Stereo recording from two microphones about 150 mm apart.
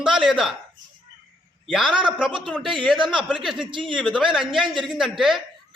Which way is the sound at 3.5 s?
35° right (ahead or behind).